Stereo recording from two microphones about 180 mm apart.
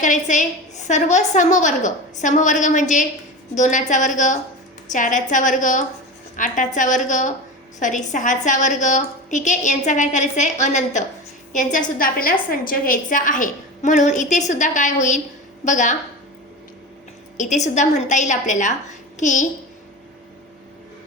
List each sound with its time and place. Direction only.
0.0 s a woman's voice: 45° left (ahead or behind)
17.3 s a woman's voice: 45° left (ahead or behind)